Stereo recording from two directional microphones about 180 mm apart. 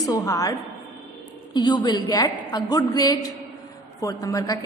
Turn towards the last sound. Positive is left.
turn(degrees=20)  # may be behind; listen again after turning